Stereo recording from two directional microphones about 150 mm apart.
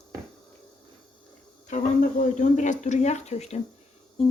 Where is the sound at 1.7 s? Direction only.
55° left (ahead or behind).